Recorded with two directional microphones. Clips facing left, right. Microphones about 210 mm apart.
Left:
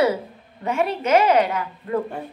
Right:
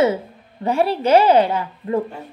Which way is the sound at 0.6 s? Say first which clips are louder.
Right 4 dB; 35° right (ahead or behind).